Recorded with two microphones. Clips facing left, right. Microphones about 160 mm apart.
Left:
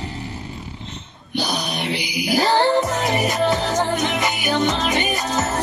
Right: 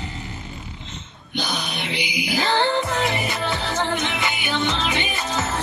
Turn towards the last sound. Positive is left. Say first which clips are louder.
# left 4 dB
turn(degrees=40)  # may be behind; listen again after turning